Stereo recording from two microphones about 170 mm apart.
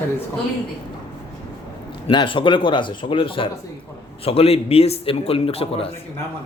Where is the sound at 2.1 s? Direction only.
30° left (ahead or behind).